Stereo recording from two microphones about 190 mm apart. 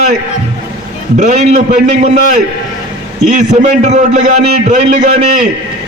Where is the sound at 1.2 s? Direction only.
40° right (ahead or behind).